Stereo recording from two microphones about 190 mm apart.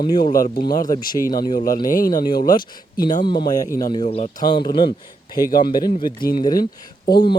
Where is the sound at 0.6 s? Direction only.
20° left (ahead or behind).